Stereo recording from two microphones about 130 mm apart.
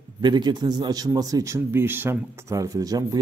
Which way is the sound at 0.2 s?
35° right (ahead or behind).